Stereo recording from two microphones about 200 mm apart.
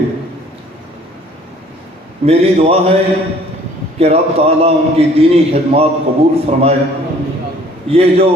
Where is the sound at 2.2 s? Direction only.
30° right (ahead or behind).